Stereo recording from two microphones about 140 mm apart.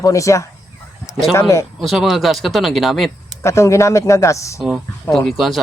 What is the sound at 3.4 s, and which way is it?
A man's voice, 20° left (ahead or behind).